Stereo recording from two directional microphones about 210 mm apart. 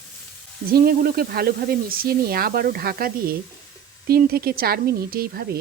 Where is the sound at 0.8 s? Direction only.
45° right (ahead or behind).